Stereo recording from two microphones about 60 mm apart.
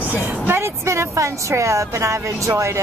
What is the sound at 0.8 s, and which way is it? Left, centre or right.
Speech, right.